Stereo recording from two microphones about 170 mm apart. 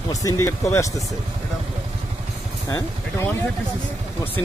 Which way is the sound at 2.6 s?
20° left (ahead or behind).